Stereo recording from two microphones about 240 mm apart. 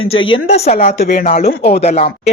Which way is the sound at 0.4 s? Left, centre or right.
Left.